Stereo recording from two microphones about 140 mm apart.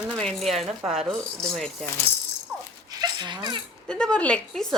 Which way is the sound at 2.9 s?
30° right (ahead or behind).